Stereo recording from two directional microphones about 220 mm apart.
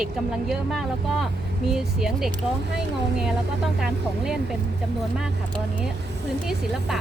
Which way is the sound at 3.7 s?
Centre (ahead or behind).